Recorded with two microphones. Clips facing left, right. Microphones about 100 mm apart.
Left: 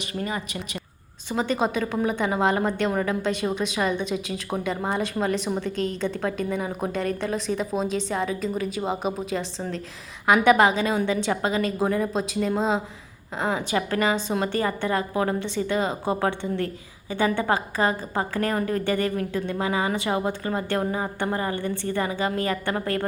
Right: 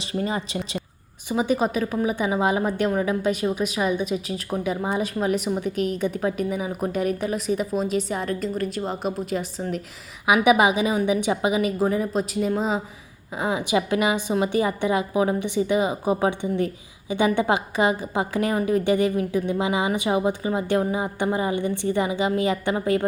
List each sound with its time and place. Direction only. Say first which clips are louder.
0.0 s speech: right 3 dB; 30° right (ahead or behind)
1.3 s a woman's voice: right 2 dB; 10° right (ahead or behind)